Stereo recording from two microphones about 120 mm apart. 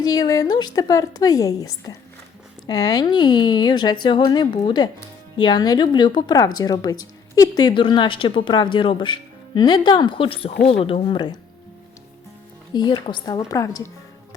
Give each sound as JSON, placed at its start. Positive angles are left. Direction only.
{"t": 0.0, "sound": "speech", "side_deg": 30}
{"t": 12.7, "sound": "speech", "side_deg": 40}